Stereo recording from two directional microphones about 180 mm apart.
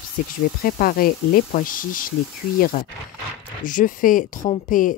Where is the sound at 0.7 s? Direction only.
50° left (ahead or behind).